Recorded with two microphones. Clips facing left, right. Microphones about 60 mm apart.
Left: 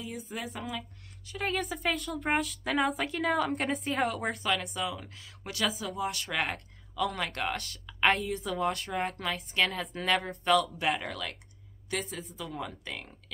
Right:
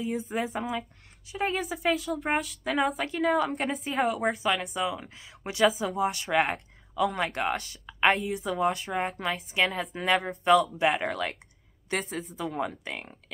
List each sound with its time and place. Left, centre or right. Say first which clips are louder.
0.1 s speech: right 8 dB; right
1.3 s a woman's voice: right 3 dB; centre
10.8 s speech: right 5 dB; right